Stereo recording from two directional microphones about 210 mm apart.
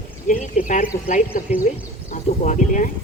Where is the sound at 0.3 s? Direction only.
35° left (ahead or behind).